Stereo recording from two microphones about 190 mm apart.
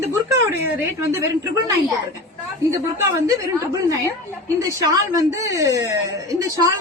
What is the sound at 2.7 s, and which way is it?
A woman's voice, 15° right (ahead or behind).